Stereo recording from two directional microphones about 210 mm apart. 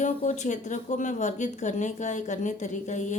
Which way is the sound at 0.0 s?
35° left (ahead or behind).